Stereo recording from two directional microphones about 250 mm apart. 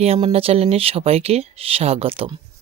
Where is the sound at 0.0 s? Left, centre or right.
Right.